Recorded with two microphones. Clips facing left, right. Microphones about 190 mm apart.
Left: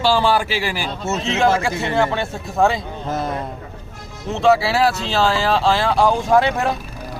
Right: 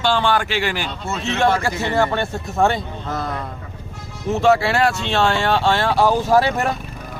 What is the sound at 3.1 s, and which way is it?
Speech, 25° left (ahead or behind).